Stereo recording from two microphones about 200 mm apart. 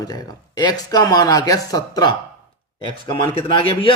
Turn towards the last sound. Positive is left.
turn(degrees=25)  # may be behind; listen again after turning